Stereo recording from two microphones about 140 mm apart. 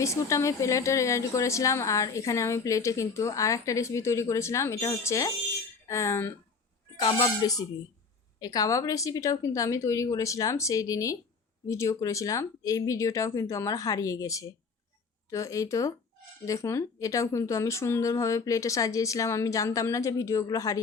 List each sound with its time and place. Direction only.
0.0 s a woman's voice: 20° left (ahead or behind)
7.0 s a woman's voice: 30° left (ahead or behind)